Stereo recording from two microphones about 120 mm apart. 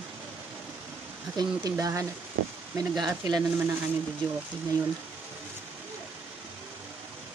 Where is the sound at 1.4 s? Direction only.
30° right (ahead or behind).